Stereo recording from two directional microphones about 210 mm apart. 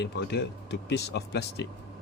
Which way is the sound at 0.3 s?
55° left (ahead or behind).